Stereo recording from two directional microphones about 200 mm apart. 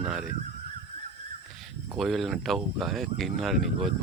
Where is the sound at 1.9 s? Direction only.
Centre (ahead or behind).